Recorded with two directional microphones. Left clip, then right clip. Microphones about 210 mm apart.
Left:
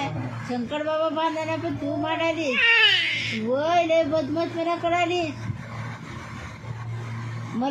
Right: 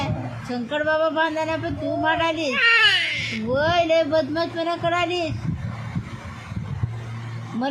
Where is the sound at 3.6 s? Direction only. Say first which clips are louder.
Right 2 dB; 40° right (ahead or behind).